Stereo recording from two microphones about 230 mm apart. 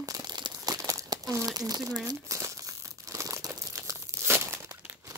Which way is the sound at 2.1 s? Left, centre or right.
Centre.